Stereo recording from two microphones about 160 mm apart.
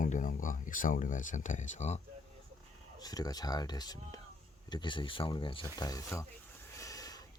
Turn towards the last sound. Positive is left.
turn(degrees=20)  # may be behind; listen again after turning